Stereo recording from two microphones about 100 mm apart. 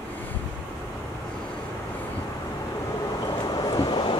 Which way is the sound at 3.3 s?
40° left (ahead or behind).